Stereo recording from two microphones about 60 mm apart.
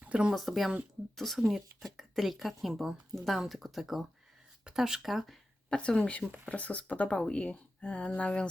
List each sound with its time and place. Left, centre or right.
0.0 s a sound: centre
0.3 s speech: centre
5.7 s speech: centre